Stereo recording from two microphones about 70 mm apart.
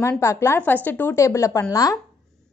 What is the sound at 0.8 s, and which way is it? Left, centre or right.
Speech, left.